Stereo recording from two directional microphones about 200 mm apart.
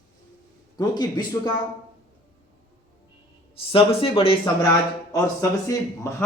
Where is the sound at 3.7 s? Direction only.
25° left (ahead or behind).